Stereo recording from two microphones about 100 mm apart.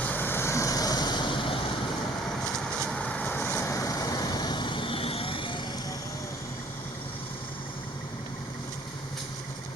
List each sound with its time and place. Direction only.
0.0 s vehicle: 20° left (ahead or behind); by 1.5 s 55° left (ahead or behind)
2.8 s vehicle: 10° left (ahead or behind)
3.5 s vehicle: 30° left (ahead or behind); by 5.5 s 60° left (ahead or behind)